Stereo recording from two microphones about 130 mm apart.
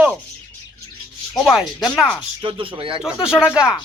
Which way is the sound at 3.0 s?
5° right (ahead or behind).